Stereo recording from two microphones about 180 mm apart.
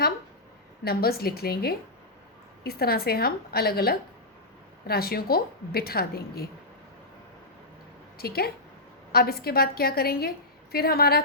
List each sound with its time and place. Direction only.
0.9 s a woman's voice: 60° left (ahead or behind)
8.2 s a woman's voice: 60° left (ahead or behind)